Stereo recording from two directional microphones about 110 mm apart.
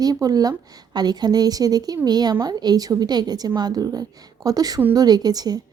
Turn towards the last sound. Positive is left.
turn(degrees=-35)  # may be behind; listen again after turning